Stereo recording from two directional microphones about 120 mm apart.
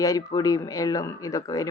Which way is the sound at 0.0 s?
30° left (ahead or behind).